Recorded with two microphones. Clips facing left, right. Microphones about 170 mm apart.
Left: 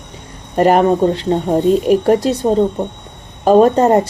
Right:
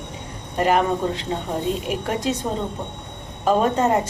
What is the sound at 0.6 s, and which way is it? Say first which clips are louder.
A woman's voice: left 8 dB; 40° left (ahead or behind).